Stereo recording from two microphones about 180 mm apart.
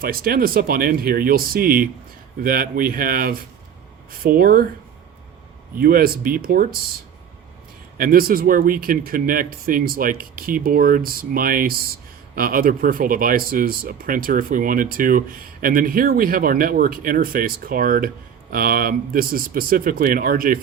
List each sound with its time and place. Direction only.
0.0 s speech: 55° right (ahead or behind)
5.8 s speech: 55° right (ahead or behind)
7.9 s speech: 50° right (ahead or behind)